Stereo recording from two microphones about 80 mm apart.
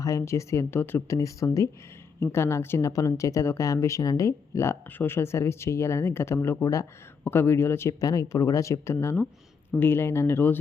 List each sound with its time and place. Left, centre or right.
0.0 s a woman's voice: left
8.0 s a woman's voice: left